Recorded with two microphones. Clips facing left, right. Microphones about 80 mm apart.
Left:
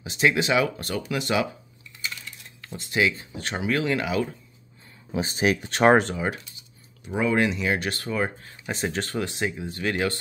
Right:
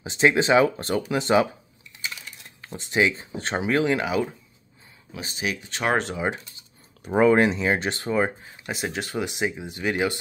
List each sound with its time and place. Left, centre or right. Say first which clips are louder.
0.0 s speech: right 3 dB; right
2.0 s speech: even; centre
5.1 s speech: left 7 dB; left
6.1 s speech: right 1 dB; centre
7.1 s speech: right 5 dB; right
8.5 s speech: left 1 dB; centre